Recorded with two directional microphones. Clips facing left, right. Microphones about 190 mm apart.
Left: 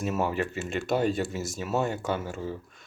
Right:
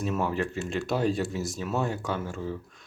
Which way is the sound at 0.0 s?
5° left (ahead or behind).